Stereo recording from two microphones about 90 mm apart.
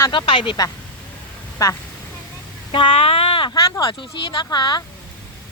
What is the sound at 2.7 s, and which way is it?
Speech, 75° left (ahead or behind).